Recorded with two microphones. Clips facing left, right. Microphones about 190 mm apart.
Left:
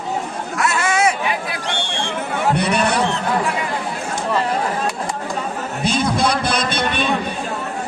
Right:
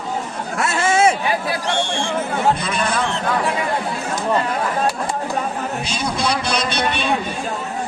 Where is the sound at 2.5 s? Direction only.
70° left (ahead or behind).